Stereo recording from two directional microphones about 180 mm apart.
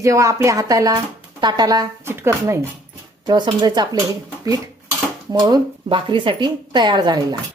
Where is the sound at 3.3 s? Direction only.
25° right (ahead or behind).